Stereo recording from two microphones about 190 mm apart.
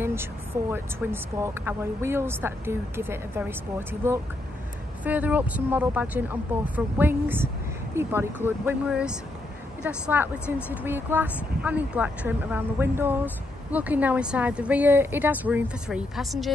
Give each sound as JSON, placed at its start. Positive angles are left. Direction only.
{"t": 0.0, "sound": "speech", "side_deg": -10}